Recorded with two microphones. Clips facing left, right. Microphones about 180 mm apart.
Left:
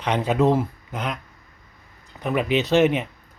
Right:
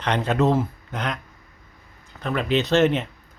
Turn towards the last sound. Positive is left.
turn(degrees=10)  # may be behind; listen again after turning